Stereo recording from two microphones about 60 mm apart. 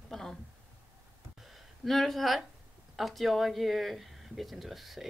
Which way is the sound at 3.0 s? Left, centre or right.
Centre.